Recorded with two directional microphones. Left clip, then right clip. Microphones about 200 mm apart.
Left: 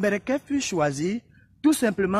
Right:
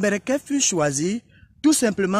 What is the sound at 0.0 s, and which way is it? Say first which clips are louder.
Speech: right 2 dB; 45° right (ahead or behind).